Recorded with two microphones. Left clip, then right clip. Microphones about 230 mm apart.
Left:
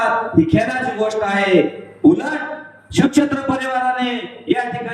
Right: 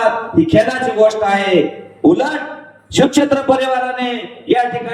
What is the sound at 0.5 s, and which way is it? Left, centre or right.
A man's voice, right.